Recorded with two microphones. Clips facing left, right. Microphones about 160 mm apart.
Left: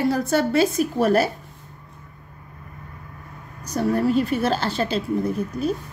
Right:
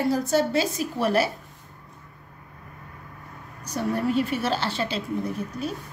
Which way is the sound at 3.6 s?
40° left (ahead or behind).